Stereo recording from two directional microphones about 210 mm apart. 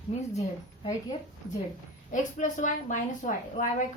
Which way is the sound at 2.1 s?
35° left (ahead or behind).